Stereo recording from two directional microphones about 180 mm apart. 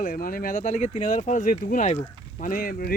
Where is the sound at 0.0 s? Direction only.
50° left (ahead or behind).